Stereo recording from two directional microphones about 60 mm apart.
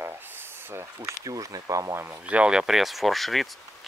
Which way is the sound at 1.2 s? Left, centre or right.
Right.